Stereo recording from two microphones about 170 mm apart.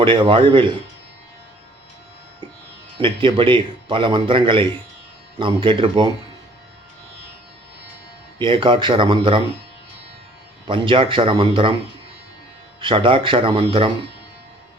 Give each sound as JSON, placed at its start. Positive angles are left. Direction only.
{"t": 0.0, "sound": "a man's voice", "side_deg": -30}
{"t": 3.0, "sound": "a man's voice", "side_deg": -30}
{"t": 8.4, "sound": "a man's voice", "side_deg": -30}
{"t": 10.7, "sound": "a man's voice", "side_deg": -30}
{"t": 12.8, "sound": "speech", "side_deg": -30}